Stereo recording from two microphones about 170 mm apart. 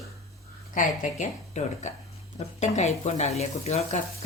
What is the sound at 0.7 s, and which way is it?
Speech, 50° left (ahead or behind).